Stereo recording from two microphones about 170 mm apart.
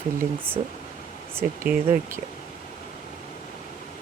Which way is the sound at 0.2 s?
10° right (ahead or behind).